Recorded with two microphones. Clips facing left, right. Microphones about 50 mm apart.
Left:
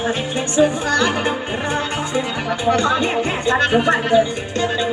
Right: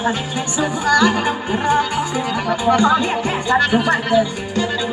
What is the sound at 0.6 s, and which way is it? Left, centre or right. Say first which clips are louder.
Speech: right 1 dB; left.